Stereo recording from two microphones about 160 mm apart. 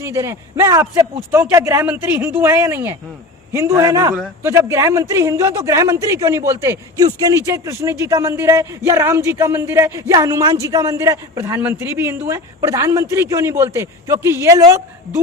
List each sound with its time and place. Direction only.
0.0 s speech: 20° right (ahead or behind)